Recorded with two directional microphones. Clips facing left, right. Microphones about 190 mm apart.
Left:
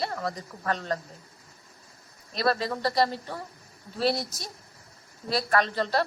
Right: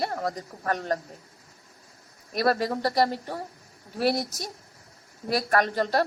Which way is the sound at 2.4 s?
40° right (ahead or behind).